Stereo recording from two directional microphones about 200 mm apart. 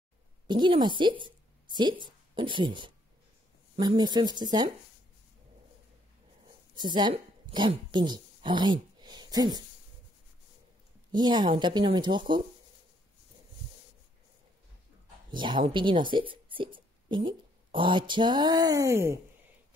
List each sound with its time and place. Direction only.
0.5 s a woman's voice: 25° right (ahead or behind)
6.7 s speech: 20° right (ahead or behind)
11.1 s speech: 20° right (ahead or behind)
15.3 s speech: 25° right (ahead or behind)